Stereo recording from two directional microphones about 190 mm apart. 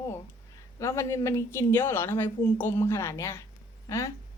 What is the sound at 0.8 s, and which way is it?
Speech, 15° left (ahead or behind).